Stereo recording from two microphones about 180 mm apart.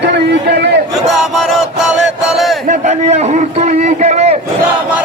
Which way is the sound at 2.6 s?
40° right (ahead or behind).